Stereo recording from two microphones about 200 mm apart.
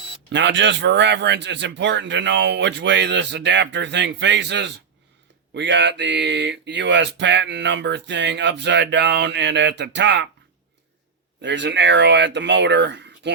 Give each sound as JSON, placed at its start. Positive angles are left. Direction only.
{"t": 0.3, "sound": "speech", "side_deg": -65}
{"t": 11.4, "sound": "speech", "side_deg": -65}